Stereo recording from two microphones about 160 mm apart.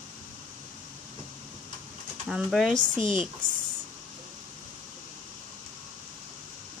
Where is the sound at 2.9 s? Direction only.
30° left (ahead or behind).